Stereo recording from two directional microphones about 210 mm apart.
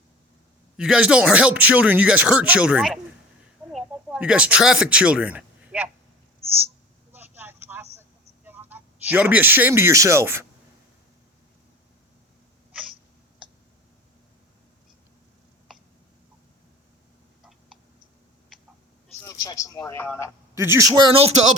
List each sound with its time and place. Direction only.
0.8 s speech: 5° right (ahead or behind)
3.7 s a sound: centre (ahead or behind)
6.4 s a sound: 25° right (ahead or behind)
7.1 s vehicle: 10° right (ahead or behind)
8.4 s speech: 10° right (ahead or behind)
19.2 s a man's voice: 15° left (ahead or behind)
20.6 s speech: 15° right (ahead or behind); by 21.4 s 30° right (ahead or behind)